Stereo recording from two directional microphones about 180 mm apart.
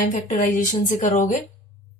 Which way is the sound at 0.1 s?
40° left (ahead or behind).